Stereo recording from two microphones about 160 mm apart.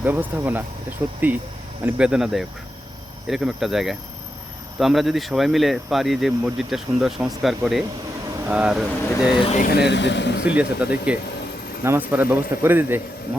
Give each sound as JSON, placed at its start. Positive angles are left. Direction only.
{"t": 0.0, "sound": "speech", "side_deg": -10}
{"t": 9.6, "sound": "speech", "side_deg": 65}
{"t": 9.9, "sound": "speech", "side_deg": 90}
{"t": 10.4, "sound": "speech", "side_deg": -10}